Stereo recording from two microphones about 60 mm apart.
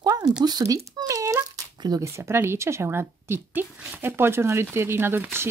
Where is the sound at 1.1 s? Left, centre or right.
Right.